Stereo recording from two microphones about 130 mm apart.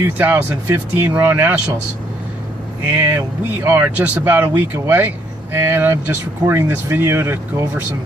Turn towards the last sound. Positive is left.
turn(degrees=-20)  # may be behind; listen again after turning